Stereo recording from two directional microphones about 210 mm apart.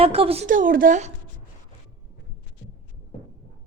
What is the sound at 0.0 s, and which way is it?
A woman's voice, 25° right (ahead or behind).